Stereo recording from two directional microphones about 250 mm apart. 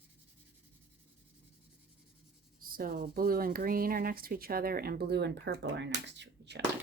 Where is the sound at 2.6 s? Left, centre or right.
Right.